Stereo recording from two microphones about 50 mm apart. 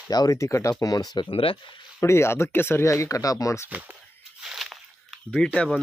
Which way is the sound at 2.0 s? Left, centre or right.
Left.